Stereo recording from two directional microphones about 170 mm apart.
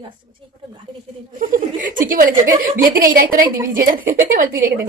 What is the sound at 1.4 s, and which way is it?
A woman's voice, 50° right (ahead or behind).